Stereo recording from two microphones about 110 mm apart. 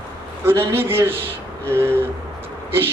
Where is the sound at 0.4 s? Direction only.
20° right (ahead or behind).